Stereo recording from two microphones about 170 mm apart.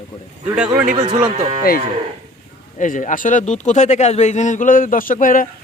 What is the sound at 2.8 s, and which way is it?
Speech, 50° left (ahead or behind).